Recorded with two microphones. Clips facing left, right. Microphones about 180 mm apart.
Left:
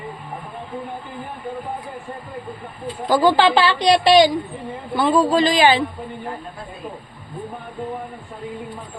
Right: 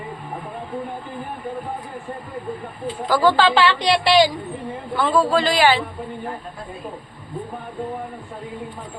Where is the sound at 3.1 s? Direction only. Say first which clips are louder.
Left 2 dB; 15° left (ahead or behind).